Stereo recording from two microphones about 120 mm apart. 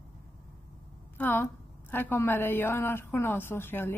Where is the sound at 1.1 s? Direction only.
15° left (ahead or behind).